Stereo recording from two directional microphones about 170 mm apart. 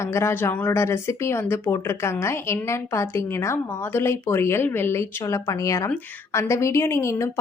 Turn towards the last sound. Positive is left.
turn(degrees=15)  # may be behind; listen again after turning